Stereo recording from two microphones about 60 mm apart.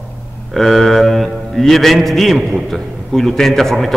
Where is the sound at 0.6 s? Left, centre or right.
Centre.